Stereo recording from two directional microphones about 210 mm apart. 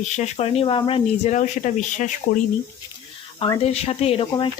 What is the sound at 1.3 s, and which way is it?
Speech, 35° left (ahead or behind).